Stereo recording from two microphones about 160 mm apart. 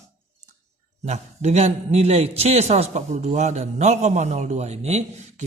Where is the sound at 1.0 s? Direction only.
45° right (ahead or behind).